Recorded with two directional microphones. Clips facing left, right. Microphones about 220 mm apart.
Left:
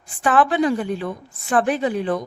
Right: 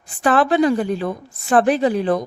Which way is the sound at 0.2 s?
40° right (ahead or behind).